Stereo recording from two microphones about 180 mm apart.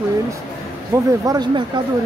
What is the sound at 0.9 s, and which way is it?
Speech, 20° right (ahead or behind).